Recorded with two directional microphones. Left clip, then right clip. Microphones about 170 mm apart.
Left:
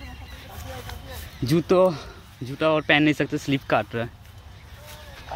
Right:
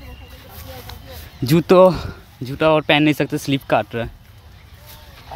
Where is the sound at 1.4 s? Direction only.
25° right (ahead or behind).